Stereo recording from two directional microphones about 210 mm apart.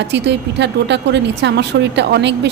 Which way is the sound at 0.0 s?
55° right (ahead or behind).